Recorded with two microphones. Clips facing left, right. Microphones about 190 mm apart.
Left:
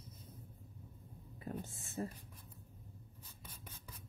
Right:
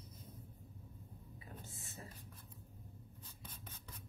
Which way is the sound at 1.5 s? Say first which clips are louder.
Left 11 dB; 50° left (ahead or behind).